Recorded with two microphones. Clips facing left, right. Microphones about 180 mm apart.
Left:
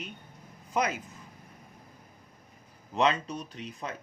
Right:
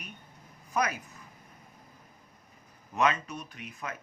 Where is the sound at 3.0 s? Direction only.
30° left (ahead or behind).